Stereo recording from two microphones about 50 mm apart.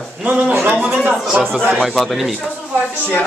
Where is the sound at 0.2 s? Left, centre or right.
Right.